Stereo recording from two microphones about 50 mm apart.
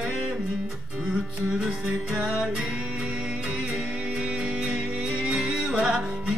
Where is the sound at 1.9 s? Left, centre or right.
Right.